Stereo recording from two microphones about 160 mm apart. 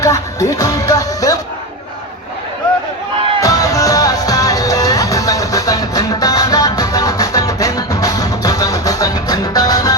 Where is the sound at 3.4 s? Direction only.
20° left (ahead or behind).